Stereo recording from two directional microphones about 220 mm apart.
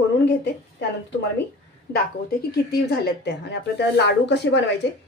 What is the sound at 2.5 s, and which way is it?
A woman's voice, 45° left (ahead or behind).